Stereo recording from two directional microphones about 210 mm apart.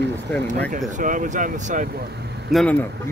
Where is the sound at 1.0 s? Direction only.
40° right (ahead or behind).